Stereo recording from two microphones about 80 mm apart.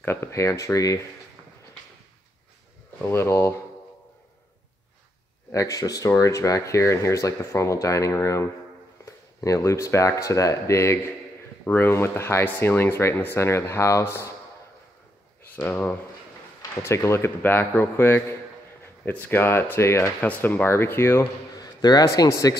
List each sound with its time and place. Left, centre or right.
0.0 s speech: left
3.0 s speech: left
5.5 s speech: left
11.6 s speech: left
15.5 s speech: left
20.2 s speech: left
21.5 s a man's voice: left